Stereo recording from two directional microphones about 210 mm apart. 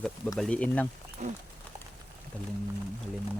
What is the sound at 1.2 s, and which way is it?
Speech, 35° right (ahead or behind).